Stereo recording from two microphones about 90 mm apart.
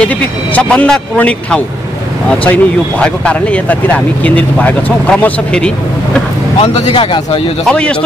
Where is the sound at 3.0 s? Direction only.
10° left (ahead or behind).